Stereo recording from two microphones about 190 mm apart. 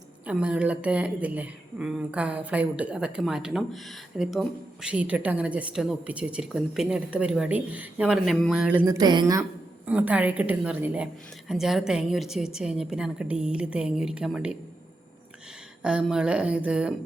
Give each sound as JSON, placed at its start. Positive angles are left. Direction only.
{"t": 0.3, "sound": "a woman's voice", "side_deg": -5}
{"t": 9.0, "sound": "a woman's voice", "side_deg": -20}
{"t": 9.4, "sound": "a woman's voice", "side_deg": -10}
{"t": 15.8, "sound": "a woman's voice", "side_deg": -5}